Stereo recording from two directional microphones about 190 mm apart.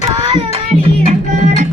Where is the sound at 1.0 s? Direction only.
35° right (ahead or behind).